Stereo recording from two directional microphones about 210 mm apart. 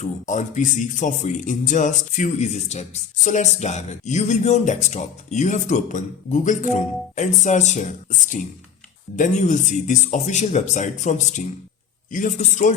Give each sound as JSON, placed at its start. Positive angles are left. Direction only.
{"t": 0.0, "sound": "speech", "side_deg": 35}